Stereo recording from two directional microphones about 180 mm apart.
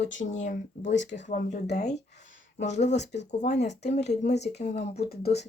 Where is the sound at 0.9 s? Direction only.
80° left.